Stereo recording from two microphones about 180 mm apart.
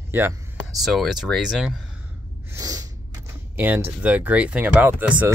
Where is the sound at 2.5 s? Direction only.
20° right (ahead or behind).